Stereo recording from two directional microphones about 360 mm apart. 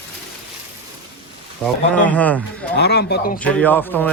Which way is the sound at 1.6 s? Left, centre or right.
Centre.